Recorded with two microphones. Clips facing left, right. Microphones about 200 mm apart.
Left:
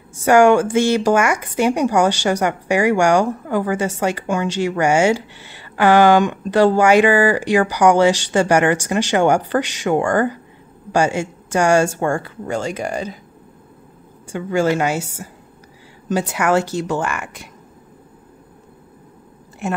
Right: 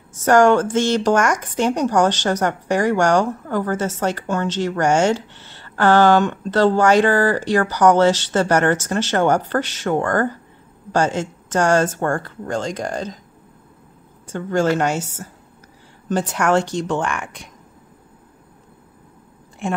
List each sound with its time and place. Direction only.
0.2 s speech: 10° left (ahead or behind)
14.2 s speech: 10° left (ahead or behind)